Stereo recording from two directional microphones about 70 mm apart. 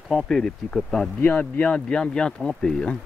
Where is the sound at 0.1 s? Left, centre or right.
Centre.